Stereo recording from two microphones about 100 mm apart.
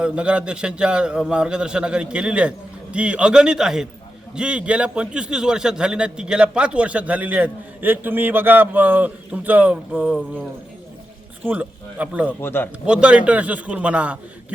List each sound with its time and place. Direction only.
0.0 s a man's voice: 10° right (ahead or behind)
11.4 s a man's voice: 15° right (ahead or behind)
12.4 s speech: 20° left (ahead or behind)
12.8 s a man's voice: 10° right (ahead or behind)